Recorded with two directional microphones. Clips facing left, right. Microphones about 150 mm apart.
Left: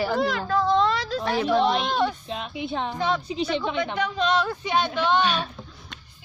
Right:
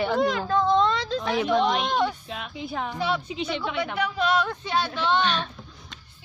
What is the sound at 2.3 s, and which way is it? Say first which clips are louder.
Speech: left 3 dB; 25° left (ahead or behind).